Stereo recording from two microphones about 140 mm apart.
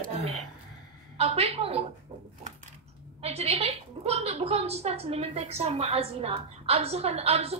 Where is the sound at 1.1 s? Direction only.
45° right (ahead or behind).